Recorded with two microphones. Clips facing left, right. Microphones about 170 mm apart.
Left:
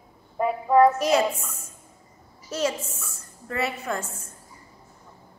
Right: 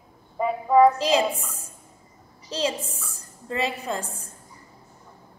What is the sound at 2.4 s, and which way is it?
A woman's voice, 15° right (ahead or behind).